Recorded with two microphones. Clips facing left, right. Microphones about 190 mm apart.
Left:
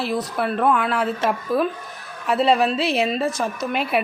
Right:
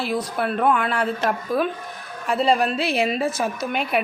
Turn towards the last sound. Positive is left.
turn(degrees=0)  # may be behind; listen again after turning